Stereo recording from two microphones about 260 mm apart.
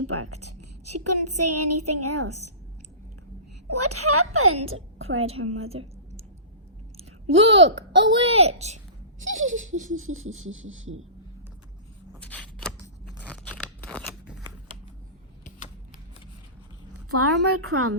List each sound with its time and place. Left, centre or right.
0.1 s a woman's voice: right
3.7 s a woman's voice: right
6.9 s a sound: right
7.9 s a child's voice: centre
10.2 s a woman's voice: right
12.2 s scissors: centre
17.1 s a woman's voice: right